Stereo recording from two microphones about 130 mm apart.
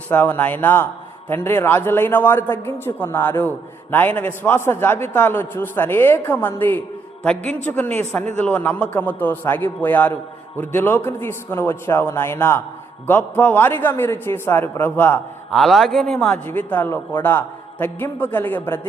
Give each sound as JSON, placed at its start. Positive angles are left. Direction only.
{"t": 0.1, "sound": "a man's voice", "side_deg": 15}
{"t": 15.5, "sound": "a man's voice", "side_deg": 0}